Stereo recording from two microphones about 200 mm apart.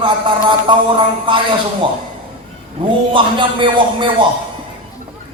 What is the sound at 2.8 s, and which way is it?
A man's voice, 25° right (ahead or behind).